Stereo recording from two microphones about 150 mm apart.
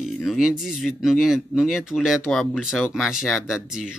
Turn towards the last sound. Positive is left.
turn(degrees=-5)  # may be behind; listen again after turning